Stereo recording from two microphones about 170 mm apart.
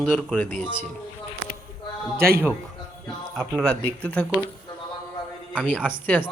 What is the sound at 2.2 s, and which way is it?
Speech, 60° right (ahead or behind).